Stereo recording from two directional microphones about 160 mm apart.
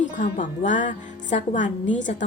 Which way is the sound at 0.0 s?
50° left (ahead or behind).